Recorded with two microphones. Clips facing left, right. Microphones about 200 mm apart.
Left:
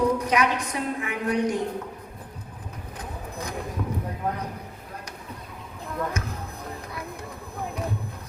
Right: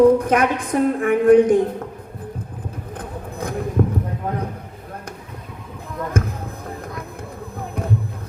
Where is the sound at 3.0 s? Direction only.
55° right (ahead or behind).